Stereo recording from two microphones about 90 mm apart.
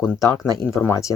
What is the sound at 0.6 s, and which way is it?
Speech, 30° left (ahead or behind).